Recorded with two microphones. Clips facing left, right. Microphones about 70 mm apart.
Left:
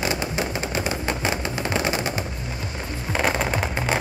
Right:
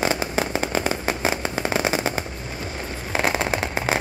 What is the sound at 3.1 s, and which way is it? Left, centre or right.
Fireworks, centre.